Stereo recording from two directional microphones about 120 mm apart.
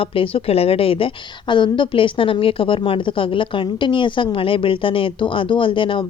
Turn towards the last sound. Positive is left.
turn(degrees=45)  # may be behind; listen again after turning